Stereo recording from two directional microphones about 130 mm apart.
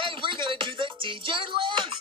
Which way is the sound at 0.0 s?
40° right (ahead or behind).